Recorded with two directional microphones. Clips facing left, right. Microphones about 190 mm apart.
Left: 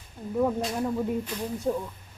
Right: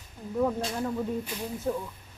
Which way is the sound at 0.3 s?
5° left (ahead or behind).